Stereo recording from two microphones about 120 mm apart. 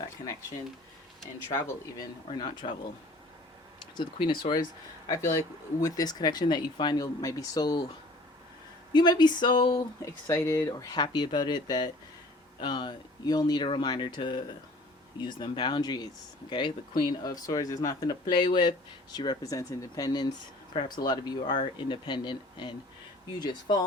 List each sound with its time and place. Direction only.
1.2 s speech: 30° left (ahead or behind)
3.8 s speech: 40° left (ahead or behind)
5.0 s speech: 25° left (ahead or behind)
8.9 s speech: 35° left (ahead or behind)
10.0 s speech: 25° left (ahead or behind)